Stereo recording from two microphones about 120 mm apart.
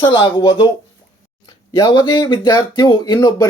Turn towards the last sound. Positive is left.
turn(degrees=35)  # may be behind; listen again after turning